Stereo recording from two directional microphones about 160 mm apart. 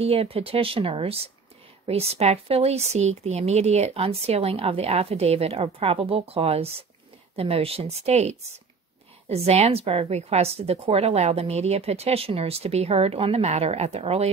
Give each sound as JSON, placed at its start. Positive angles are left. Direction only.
{"t": 0.0, "sound": "speech", "side_deg": -40}